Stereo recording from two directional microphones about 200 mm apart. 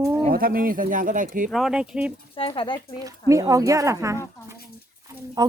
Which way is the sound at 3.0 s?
15° right (ahead or behind).